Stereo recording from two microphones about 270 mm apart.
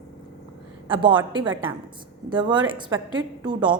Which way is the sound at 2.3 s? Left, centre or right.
Centre.